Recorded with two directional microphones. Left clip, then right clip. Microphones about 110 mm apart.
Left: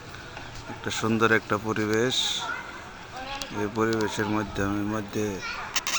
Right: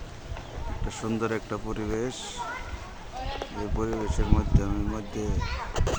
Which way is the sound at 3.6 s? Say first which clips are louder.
Left 6 dB; 30° left (ahead or behind).